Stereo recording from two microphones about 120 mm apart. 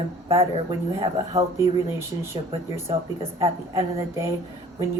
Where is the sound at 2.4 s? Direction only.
40° right (ahead or behind).